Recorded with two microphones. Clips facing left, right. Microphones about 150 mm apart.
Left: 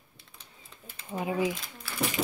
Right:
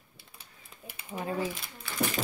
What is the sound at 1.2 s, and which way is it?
Speech, 15° left (ahead or behind).